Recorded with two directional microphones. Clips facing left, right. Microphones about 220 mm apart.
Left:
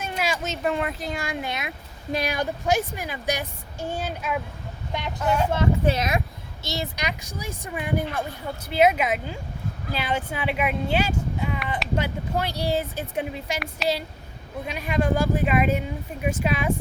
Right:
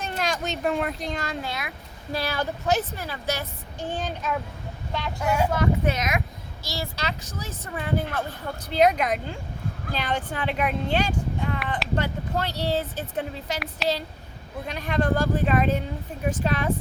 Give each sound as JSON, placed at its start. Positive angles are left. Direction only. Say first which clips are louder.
{"t": 0.2, "sound": "a child's voice", "louder": "even", "side_deg": 5}
{"t": 5.2, "sound": "speech", "louder": "left 1 dB", "side_deg": -10}
{"t": 5.5, "sound": "a child's voice", "louder": "left 1 dB", "side_deg": 30}
{"t": 14.7, "sound": "a child's voice", "louder": "even", "side_deg": 10}